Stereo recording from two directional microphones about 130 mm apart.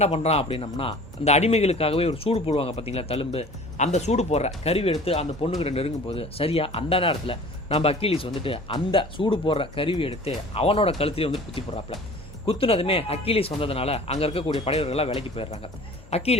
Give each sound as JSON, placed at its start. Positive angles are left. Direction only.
{"t": 0.0, "sound": "a man's voice", "side_deg": 55}